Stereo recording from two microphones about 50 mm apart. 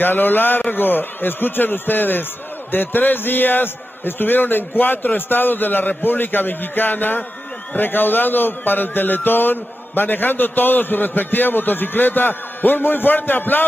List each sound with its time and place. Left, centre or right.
0.0 s a man's voice: left